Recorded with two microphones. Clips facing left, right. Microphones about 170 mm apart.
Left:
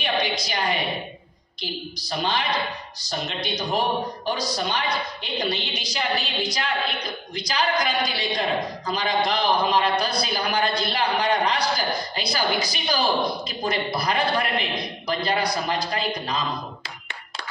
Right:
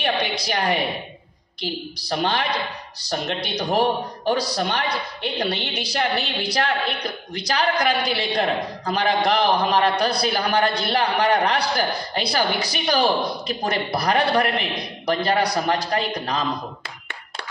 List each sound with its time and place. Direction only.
0.0 s a woman's voice: 65° right (ahead or behind)